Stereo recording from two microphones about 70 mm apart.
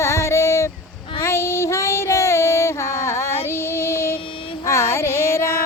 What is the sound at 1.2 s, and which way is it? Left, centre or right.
Child singing, left.